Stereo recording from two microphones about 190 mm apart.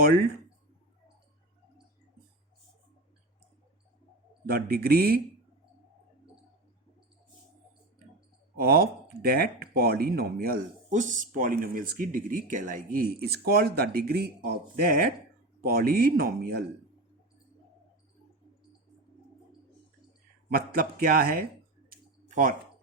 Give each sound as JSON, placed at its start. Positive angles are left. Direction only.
{"t": 4.4, "sound": "speech", "side_deg": -50}
{"t": 8.5, "sound": "speech", "side_deg": -50}
{"t": 20.5, "sound": "speech", "side_deg": -50}
{"t": 21.8, "sound": "a sound", "side_deg": -45}